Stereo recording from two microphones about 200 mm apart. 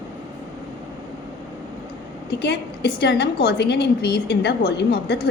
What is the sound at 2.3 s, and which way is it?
A woman's voice, 60° left (ahead or behind).